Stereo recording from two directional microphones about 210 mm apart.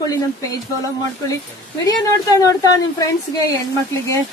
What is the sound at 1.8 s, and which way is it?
A woman's voice, 15° left (ahead or behind).